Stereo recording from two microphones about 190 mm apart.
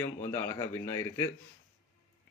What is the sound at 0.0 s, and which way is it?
A man's voice, 15° left (ahead or behind).